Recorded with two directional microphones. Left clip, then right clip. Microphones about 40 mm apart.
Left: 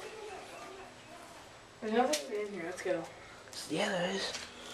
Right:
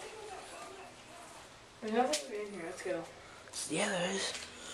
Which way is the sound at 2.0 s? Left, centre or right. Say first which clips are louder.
Left 2 dB; left.